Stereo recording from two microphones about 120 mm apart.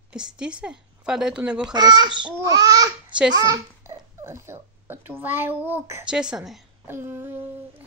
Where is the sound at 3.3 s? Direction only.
30° right (ahead or behind).